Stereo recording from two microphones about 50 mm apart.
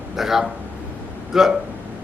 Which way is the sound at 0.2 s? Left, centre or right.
Centre.